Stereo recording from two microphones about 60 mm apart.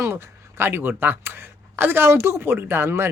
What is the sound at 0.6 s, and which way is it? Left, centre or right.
Speech, right.